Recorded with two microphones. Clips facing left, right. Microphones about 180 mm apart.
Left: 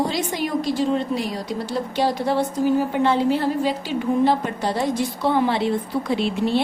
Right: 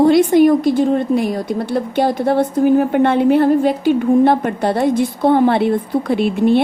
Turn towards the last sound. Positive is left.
turn(degrees=-55)  # may be behind; listen again after turning